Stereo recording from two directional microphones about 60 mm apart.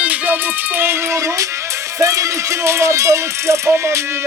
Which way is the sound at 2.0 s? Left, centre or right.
Right.